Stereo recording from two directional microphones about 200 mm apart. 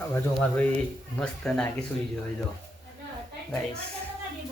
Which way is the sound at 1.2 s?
5° left (ahead or behind).